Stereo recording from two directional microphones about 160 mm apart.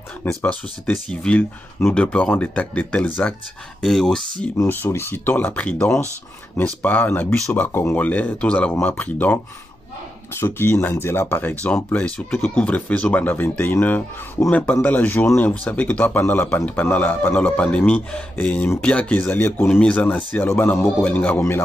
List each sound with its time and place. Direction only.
0.2 s speech: 10° left (ahead or behind)
4.6 s speech: 15° left (ahead or behind)